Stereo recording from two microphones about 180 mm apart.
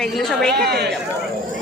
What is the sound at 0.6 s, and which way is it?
Speech, 65° right (ahead or behind).